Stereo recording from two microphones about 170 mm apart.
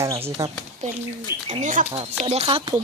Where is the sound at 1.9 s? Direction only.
35° right (ahead or behind).